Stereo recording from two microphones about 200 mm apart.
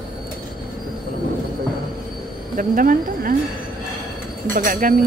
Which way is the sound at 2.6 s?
45° right (ahead or behind).